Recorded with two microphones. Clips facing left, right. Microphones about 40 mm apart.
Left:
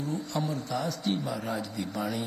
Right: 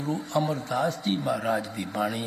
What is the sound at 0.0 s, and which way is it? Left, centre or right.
A man's voice, right.